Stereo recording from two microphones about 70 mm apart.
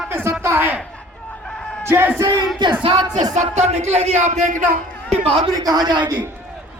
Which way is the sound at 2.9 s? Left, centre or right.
Right.